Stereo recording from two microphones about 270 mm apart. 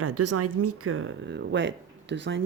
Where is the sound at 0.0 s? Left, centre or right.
Right.